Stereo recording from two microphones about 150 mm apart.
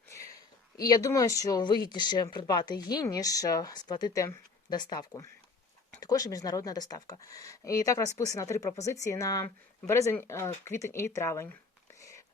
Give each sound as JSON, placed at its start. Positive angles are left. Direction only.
{"t": 0.8, "sound": "speech", "side_deg": 25}
{"t": 11.9, "sound": "whispering", "side_deg": 20}